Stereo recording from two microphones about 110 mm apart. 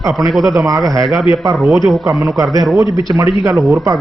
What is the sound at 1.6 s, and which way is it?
Speech, centre (ahead or behind).